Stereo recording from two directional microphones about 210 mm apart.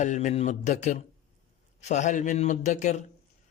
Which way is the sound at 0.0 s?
35° left (ahead or behind).